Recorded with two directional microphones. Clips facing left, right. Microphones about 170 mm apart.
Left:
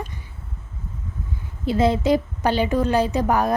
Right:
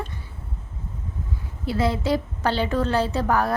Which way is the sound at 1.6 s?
20° left (ahead or behind).